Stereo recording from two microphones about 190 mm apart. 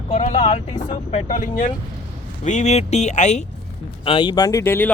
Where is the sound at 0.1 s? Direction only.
35° left (ahead or behind).